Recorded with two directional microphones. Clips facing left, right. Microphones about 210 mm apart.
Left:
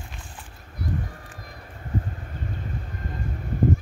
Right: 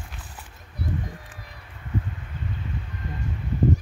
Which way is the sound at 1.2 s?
45° left (ahead or behind).